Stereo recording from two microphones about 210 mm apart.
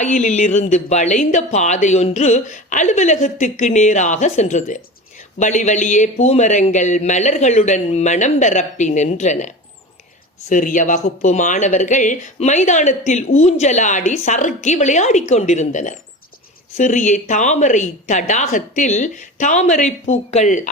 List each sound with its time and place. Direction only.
0.0 s speech: 35° left (ahead or behind)
10.5 s speech: 40° left (ahead or behind)